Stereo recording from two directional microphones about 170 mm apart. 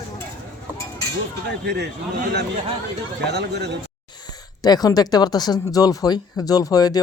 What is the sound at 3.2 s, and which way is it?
Speech, 80° right.